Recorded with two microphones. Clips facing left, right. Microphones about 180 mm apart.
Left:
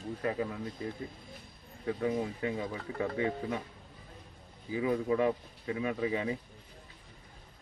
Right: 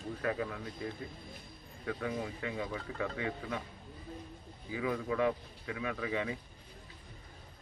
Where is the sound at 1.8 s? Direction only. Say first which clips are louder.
Left 5 dB; 25° left (ahead or behind).